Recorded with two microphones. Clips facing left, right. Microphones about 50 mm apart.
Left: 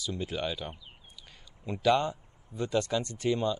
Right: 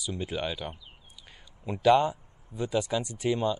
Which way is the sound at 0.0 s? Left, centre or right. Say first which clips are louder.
Right 1 dB; centre.